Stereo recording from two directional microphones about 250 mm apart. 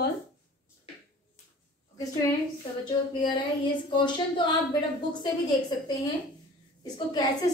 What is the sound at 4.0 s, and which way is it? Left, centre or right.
A woman's voice, centre.